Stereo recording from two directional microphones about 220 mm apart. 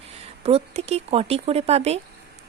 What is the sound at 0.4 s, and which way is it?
Speech, 30° right (ahead or behind).